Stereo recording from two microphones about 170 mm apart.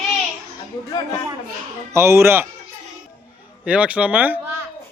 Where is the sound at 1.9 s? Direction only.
15° right (ahead or behind).